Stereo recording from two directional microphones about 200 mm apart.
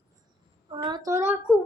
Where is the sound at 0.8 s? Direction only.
20° right (ahead or behind).